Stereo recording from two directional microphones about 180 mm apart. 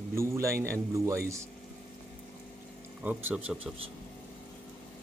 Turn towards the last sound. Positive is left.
turn(degrees=-5)  # may be behind; listen again after turning